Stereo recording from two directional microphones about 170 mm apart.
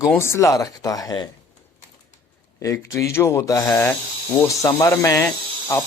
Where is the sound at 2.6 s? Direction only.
15° left (ahead or behind).